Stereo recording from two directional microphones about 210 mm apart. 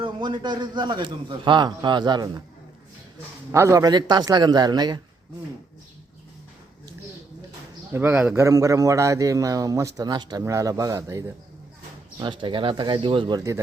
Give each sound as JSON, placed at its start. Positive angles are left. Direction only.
{"t": 0.0, "sound": "a man's voice", "side_deg": -20}
{"t": 3.5, "sound": "a man's voice", "side_deg": -15}
{"t": 7.9, "sound": "a man's voice", "side_deg": -5}